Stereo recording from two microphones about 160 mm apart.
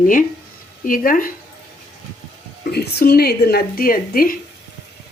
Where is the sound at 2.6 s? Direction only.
90° left; by 4.4 s 65° left (ahead or behind).